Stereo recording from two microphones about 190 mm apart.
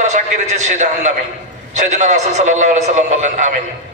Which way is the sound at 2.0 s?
35° right (ahead or behind).